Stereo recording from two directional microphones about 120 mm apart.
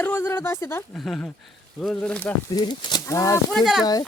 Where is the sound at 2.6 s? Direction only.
35° left (ahead or behind).